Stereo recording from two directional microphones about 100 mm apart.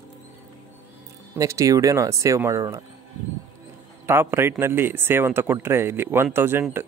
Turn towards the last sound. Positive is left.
turn(degrees=-25)  # may be behind; listen again after turning